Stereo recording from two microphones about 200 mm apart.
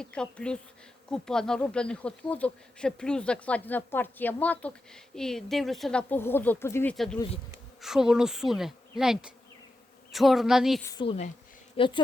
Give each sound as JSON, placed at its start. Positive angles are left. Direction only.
{"t": 0.0, "sound": "speech", "side_deg": 5}
{"t": 6.9, "sound": "speech", "side_deg": 0}
{"t": 10.8, "sound": "a woman's voice", "side_deg": 25}